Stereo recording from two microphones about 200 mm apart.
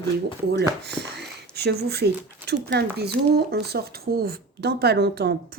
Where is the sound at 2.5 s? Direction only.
55° right (ahead or behind).